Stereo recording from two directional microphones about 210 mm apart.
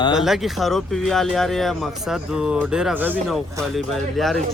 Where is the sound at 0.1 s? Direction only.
Centre (ahead or behind).